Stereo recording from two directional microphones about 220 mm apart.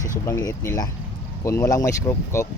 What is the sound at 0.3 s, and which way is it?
Speech, 15° left (ahead or behind).